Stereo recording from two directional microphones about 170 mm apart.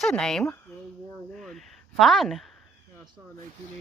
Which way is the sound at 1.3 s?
Centre (ahead or behind).